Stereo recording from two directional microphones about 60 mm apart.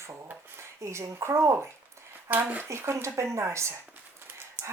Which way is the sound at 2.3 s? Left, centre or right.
Right.